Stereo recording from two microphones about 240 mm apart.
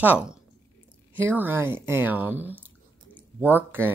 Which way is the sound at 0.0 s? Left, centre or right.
Centre.